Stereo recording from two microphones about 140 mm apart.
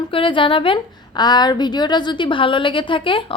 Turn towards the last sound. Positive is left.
turn(degrees=35)  # may be behind; listen again after turning